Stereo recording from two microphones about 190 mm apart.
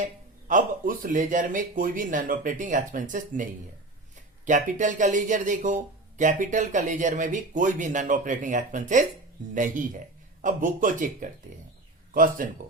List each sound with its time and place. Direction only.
0.0 s speech: 45° right (ahead or behind)